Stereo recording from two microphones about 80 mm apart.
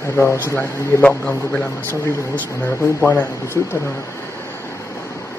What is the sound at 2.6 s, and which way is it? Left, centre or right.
Speech, centre.